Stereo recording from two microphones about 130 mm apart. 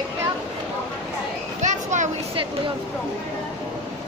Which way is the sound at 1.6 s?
70° right (ahead or behind).